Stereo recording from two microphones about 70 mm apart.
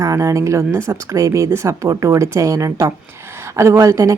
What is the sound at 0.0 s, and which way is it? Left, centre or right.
A woman's voice, right.